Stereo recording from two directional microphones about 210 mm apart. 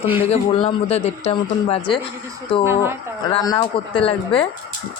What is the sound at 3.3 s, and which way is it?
Speech, 20° left (ahead or behind).